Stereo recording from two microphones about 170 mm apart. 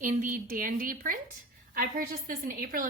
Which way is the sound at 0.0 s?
50° right (ahead or behind).